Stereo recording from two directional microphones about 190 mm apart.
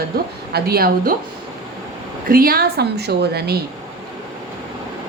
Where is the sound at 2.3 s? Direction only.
50° right (ahead or behind).